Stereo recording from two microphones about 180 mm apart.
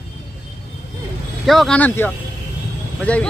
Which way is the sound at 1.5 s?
Centre (ahead or behind).